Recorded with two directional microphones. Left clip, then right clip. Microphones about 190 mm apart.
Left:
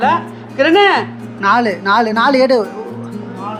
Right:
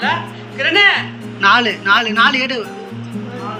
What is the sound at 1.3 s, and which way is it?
Speech, 20° left (ahead or behind).